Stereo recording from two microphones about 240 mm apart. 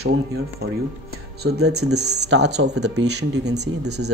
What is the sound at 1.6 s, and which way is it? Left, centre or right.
Speech, right.